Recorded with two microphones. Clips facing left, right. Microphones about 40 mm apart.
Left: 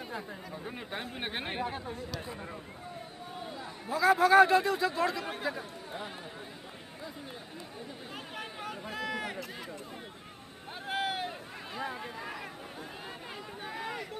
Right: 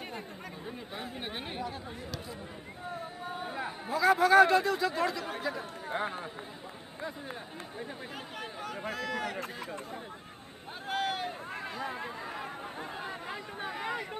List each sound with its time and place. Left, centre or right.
1.1 s speech: left
3.3 s chatter: right
3.9 s speech: centre
5.9 s speech: right
8.9 s run: centre
10.9 s a sound: centre
13.0 s chatter: centre